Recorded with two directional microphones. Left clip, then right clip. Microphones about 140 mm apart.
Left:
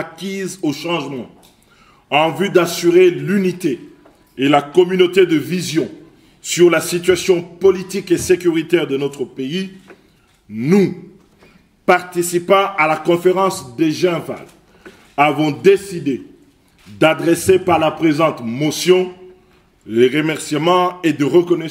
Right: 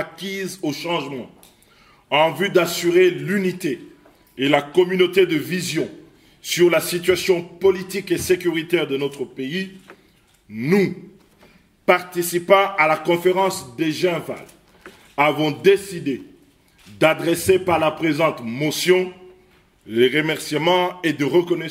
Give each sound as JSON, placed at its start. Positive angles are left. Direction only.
{"t": 0.0, "sound": "a man's voice", "side_deg": 15}